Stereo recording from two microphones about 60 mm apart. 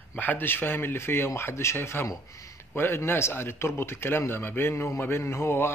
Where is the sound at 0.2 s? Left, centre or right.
Left.